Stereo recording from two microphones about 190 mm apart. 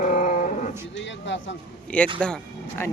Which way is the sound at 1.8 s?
5° left (ahead or behind).